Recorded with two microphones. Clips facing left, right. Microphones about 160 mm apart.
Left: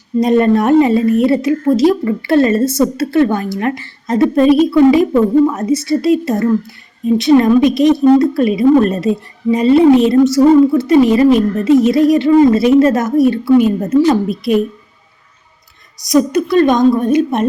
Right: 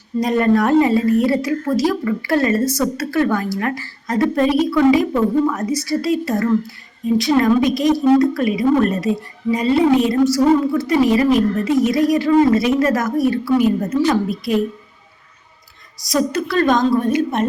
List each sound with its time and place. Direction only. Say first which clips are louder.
0.2 s a woman's voice: left 4 dB; 25° left (ahead or behind)
16.0 s a woman's voice: left 7 dB; 20° left (ahead or behind)